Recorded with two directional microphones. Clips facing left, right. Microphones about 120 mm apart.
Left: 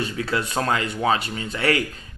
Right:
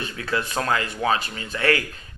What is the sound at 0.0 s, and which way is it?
Speech, 30° left (ahead or behind).